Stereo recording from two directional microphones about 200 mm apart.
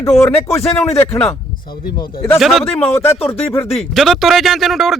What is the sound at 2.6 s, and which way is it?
Speech, 10° left (ahead or behind).